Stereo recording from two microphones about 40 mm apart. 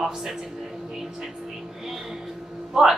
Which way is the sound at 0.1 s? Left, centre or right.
Centre.